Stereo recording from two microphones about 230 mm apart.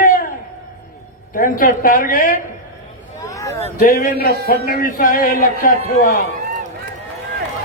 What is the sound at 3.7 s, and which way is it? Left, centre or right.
Speech, left.